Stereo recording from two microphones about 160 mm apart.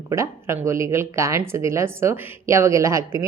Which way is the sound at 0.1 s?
15° right (ahead or behind).